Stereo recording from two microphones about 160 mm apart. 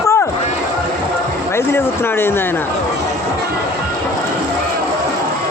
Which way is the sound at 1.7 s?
15° left (ahead or behind).